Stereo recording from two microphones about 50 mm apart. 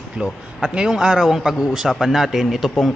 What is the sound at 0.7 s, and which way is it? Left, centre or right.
A man's voice, centre.